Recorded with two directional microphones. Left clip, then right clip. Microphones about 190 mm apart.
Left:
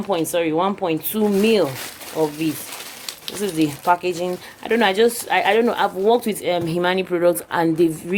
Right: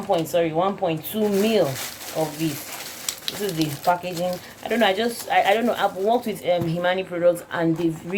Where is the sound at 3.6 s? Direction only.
55° left (ahead or behind).